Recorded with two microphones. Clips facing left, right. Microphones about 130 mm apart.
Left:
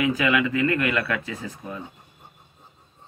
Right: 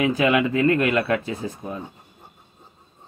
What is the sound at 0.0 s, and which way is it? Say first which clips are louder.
Speech: right 3 dB; 30° right (ahead or behind).